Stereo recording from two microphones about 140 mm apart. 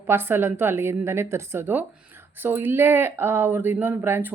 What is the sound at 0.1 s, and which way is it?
Speech, 15° right (ahead or behind).